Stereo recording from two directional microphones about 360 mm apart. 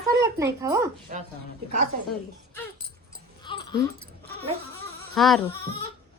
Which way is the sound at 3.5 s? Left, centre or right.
Centre.